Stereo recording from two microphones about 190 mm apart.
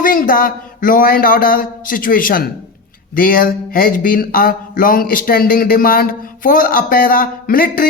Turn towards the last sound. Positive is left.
turn(degrees=45)  # may be behind; listen again after turning